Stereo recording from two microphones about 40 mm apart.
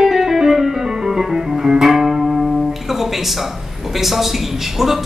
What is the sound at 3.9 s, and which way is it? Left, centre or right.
A woman's voice, centre.